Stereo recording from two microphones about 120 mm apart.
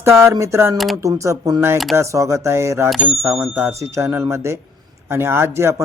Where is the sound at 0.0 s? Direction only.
20° right (ahead or behind).